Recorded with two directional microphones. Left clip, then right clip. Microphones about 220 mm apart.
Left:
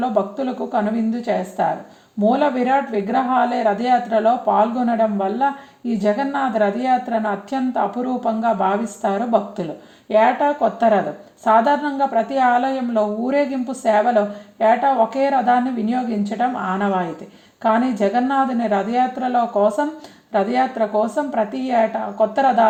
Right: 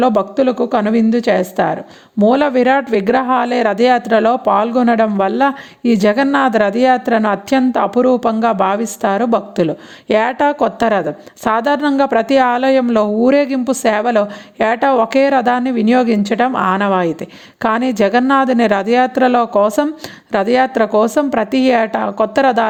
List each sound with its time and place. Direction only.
0.0 s speech: 50° right (ahead or behind)